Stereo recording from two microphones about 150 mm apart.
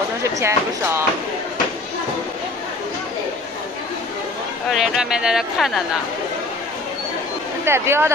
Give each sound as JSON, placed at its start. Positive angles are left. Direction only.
{"t": 0.2, "sound": "speech", "side_deg": -20}
{"t": 4.6, "sound": "speech", "side_deg": -5}
{"t": 7.6, "sound": "speech", "side_deg": -15}